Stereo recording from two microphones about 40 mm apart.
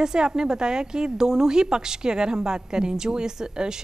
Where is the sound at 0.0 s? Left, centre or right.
Centre.